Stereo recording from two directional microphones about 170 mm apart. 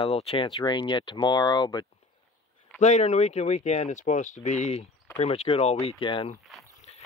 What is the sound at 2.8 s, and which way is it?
Speech, 40° left (ahead or behind).